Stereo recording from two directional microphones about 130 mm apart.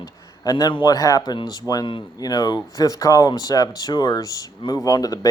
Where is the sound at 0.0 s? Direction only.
30° left (ahead or behind).